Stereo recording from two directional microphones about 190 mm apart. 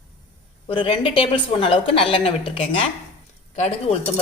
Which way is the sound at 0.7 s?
30° left (ahead or behind).